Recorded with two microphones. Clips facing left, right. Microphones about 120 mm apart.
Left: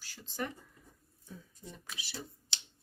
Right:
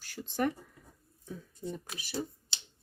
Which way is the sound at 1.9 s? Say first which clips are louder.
Right 9 dB; 45° right (ahead or behind).